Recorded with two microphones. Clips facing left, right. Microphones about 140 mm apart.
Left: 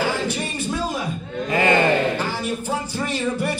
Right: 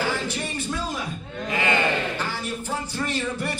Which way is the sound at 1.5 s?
40° left (ahead or behind).